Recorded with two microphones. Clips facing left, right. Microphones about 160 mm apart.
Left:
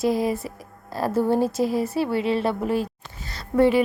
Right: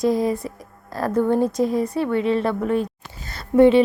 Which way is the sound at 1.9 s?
30° left (ahead or behind).